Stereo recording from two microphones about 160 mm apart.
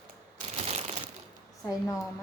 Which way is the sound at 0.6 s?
40° right (ahead or behind).